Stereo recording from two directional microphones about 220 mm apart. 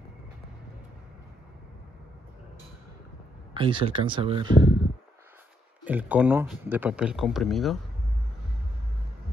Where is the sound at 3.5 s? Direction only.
20° right (ahead or behind).